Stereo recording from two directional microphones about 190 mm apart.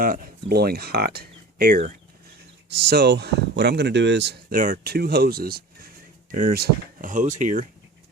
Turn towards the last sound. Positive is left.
turn(degrees=-40)  # may be behind; listen again after turning